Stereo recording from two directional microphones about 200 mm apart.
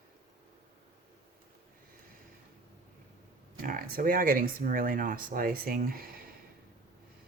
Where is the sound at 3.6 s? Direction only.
45° right (ahead or behind).